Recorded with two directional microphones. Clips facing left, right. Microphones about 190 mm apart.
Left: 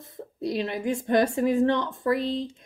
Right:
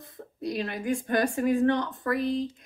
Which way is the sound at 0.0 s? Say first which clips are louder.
Left 3 dB; 25° left (ahead or behind).